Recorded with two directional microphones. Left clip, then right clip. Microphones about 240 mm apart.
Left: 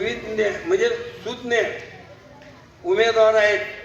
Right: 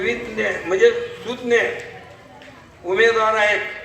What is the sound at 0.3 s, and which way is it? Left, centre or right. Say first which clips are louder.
A woman's voice: even; right.